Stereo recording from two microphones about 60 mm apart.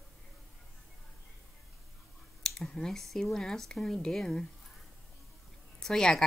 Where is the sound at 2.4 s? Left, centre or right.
Centre.